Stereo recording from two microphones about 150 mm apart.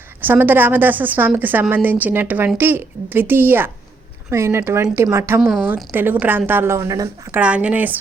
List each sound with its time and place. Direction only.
0.2 s a woman's voice: 15° right (ahead or behind)
5.4 s a woman's voice: centre (ahead or behind)
5.6 s a woman's voice: 15° right (ahead or behind)
7.3 s a woman's voice: 10° right (ahead or behind)